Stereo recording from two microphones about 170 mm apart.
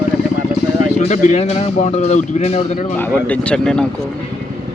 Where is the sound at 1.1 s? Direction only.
40° left (ahead or behind).